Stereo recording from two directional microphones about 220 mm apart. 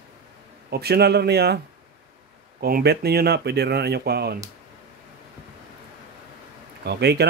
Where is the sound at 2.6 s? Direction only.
45° right (ahead or behind).